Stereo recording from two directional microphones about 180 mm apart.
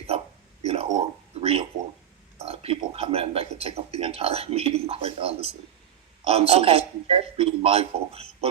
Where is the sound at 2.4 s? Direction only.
35° right (ahead or behind).